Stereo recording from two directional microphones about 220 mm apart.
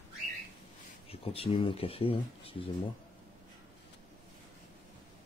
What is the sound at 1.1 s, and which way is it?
Speech, 25° left (ahead or behind).